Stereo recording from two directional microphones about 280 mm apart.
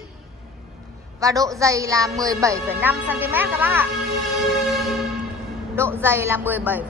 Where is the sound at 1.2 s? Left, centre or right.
Centre.